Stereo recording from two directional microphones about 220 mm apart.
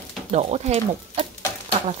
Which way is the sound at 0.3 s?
30° right (ahead or behind).